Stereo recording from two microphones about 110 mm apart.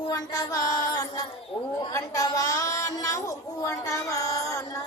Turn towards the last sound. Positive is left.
turn(degrees=30)  # may be behind; listen again after turning